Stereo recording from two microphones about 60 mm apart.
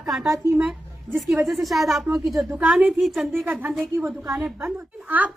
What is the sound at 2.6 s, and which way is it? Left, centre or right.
Speech, right.